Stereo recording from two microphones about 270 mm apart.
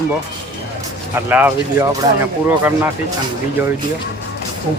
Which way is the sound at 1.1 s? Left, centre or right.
Centre.